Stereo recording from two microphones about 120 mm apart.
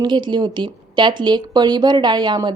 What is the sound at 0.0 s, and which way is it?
A woman's voice, 40° right (ahead or behind).